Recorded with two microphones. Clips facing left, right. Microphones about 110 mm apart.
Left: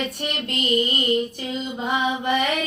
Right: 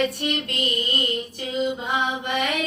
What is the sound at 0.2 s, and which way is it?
Child singing, 25° left (ahead or behind).